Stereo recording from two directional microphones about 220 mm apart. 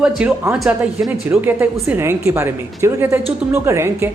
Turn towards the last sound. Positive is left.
turn(degrees=-10)  # may be behind; listen again after turning